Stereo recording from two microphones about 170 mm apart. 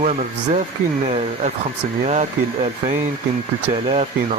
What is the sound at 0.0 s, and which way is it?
Speech, 45° right (ahead or behind).